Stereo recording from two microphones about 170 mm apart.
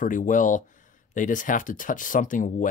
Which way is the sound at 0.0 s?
50° left (ahead or behind).